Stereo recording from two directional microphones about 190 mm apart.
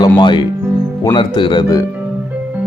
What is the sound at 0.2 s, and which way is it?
Speech, 25° left (ahead or behind).